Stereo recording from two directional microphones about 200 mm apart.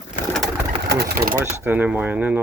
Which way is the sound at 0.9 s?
55° right (ahead or behind).